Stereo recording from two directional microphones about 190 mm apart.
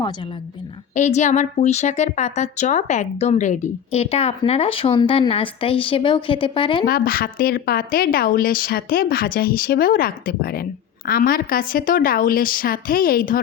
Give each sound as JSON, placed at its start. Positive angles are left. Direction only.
{"t": 0.9, "sound": "a woman's voice", "side_deg": 40}
{"t": 6.8, "sound": "a woman's voice", "side_deg": 50}